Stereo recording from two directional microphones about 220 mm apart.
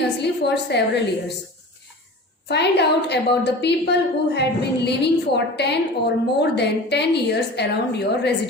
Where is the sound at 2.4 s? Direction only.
50° left (ahead or behind).